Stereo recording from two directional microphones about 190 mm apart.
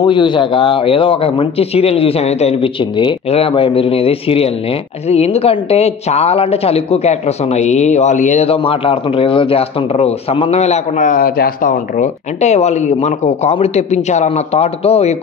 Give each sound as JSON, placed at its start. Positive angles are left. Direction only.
{"t": 0.0, "sound": "a woman's voice", "side_deg": 25}